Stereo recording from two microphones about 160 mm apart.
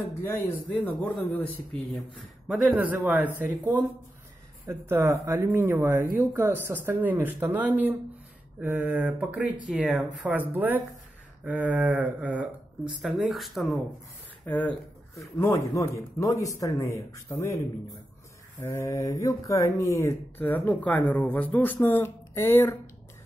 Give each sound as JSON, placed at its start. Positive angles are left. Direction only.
{"t": 0.2, "sound": "speech", "side_deg": 10}
{"t": 2.0, "sound": "speech", "side_deg": -5}
{"t": 14.4, "sound": "a man's voice", "side_deg": 10}
{"t": 18.6, "sound": "speech", "side_deg": 15}